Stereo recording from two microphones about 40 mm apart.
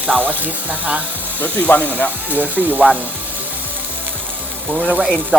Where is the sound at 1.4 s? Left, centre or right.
Left.